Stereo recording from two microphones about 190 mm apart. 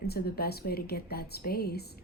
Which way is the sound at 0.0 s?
55° left (ahead or behind).